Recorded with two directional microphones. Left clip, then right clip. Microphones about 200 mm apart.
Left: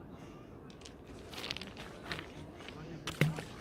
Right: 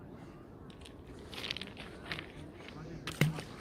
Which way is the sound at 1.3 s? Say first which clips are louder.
Right 1 dB; 5° left (ahead or behind).